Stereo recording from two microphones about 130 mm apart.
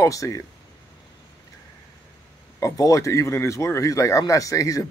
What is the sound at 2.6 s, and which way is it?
Speech, 25° left (ahead or behind).